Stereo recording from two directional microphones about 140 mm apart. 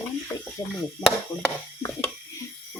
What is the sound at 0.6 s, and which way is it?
Chop, 30° left (ahead or behind).